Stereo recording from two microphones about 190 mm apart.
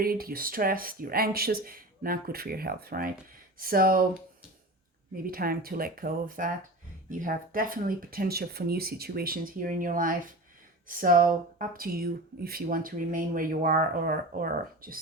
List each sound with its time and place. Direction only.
0.0 s speech: 50° right (ahead or behind)
5.1 s speech: 50° right (ahead or behind)